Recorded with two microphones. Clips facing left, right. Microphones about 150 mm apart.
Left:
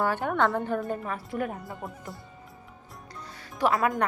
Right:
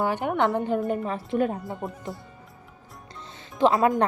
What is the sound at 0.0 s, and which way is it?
Speech, 15° right (ahead or behind).